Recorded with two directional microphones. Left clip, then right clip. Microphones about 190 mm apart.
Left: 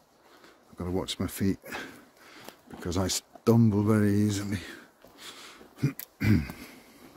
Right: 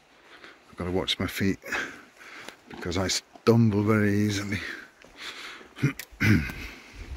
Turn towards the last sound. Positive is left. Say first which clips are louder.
# right 5 dB
turn(degrees=5)  # may be behind; listen again after turning